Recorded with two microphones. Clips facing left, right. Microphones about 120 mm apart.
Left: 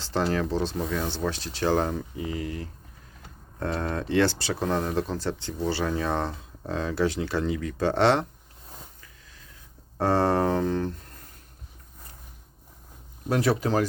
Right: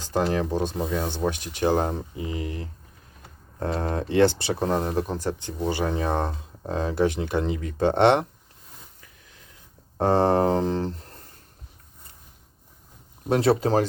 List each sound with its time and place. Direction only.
0.0 s speech: 15° right (ahead or behind)
10.0 s speech: 20° right (ahead or behind)
13.2 s speech: 30° right (ahead or behind)